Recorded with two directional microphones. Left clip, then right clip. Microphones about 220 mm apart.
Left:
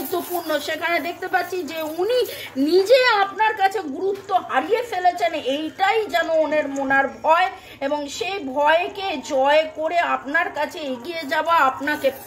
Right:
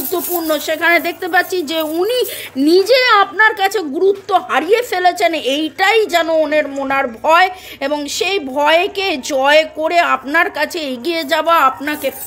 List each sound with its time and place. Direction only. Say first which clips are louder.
0.1 s a woman's voice: right 6 dB; 25° right (ahead or behind)